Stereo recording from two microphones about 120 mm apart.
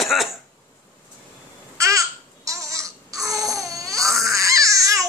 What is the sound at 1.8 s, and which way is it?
Babbling, 25° right (ahead or behind).